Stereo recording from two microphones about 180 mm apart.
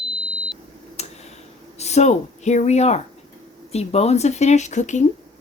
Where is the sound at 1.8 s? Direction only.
40° left (ahead or behind).